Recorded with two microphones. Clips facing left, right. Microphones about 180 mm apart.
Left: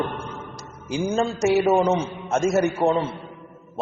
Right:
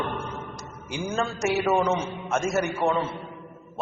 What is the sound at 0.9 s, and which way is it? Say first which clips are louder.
A man's voice: left 5 dB; 30° left (ahead or behind).